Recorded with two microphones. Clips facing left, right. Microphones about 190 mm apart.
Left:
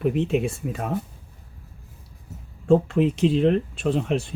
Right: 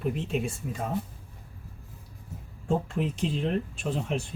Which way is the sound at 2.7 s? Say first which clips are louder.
Left 10 dB; 70° left (ahead or behind).